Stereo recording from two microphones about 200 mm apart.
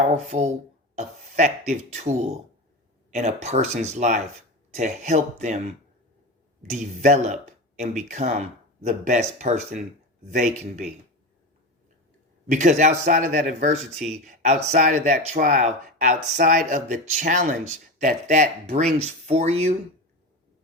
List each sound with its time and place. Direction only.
0.1 s speech: 35° right (ahead or behind)
6.7 s speech: 35° right (ahead or behind)
12.5 s speech: 40° right (ahead or behind)